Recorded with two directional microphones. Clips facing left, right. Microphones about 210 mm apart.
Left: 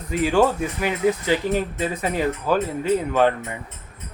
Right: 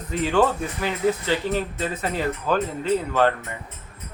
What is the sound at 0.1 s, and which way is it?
Speech, 10° left (ahead or behind).